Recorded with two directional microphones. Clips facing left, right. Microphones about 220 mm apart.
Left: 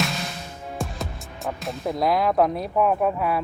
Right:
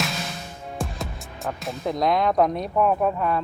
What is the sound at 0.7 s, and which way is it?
Speech, centre (ahead or behind).